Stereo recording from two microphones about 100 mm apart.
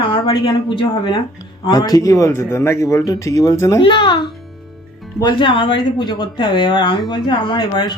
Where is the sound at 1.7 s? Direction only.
40° left (ahead or behind).